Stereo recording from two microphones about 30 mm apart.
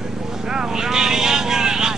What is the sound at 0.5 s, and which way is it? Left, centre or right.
Vehicle, centre.